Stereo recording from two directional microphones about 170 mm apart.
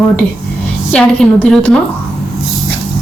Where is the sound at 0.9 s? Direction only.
5° left (ahead or behind).